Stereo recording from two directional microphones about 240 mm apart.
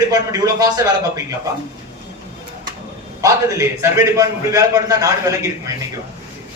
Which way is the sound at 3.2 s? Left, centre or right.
Centre.